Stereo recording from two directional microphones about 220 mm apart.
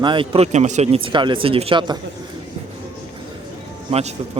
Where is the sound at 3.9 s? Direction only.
30° right (ahead or behind).